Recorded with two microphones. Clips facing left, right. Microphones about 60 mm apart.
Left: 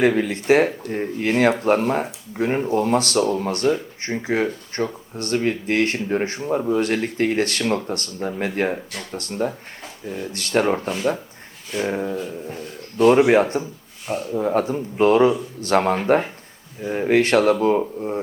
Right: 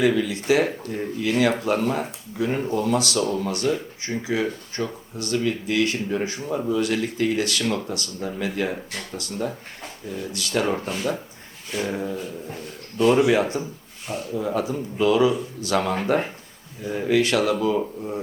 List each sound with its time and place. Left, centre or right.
0.0 s speech: left
11.8 s speech: left
13.0 s speech: left